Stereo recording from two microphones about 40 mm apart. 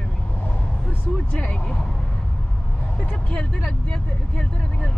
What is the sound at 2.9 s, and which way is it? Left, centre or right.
Speech, left.